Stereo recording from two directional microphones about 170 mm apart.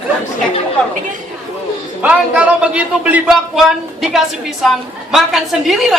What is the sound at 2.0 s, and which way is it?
A man's voice, 5° right (ahead or behind).